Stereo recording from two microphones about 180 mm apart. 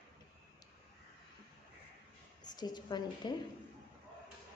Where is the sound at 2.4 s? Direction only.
25° left (ahead or behind).